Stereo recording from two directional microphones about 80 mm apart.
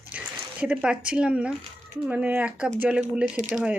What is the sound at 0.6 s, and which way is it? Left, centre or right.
Speech, centre.